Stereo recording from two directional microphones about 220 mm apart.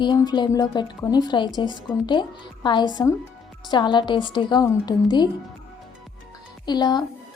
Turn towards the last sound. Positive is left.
turn(degrees=20)  # may be behind; listen again after turning